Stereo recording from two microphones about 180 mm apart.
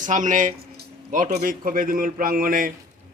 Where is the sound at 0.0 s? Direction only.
45° right (ahead or behind).